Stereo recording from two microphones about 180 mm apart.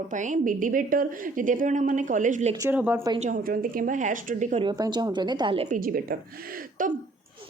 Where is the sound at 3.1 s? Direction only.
45° right (ahead or behind).